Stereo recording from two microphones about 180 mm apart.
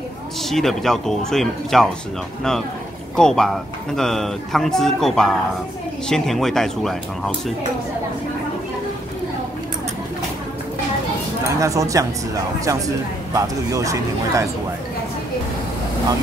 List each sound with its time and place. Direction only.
0.4 s speech: centre (ahead or behind)
3.2 s speech: 5° left (ahead or behind)
11.6 s speech: 15° right (ahead or behind)
13.3 s speech: 20° right (ahead or behind)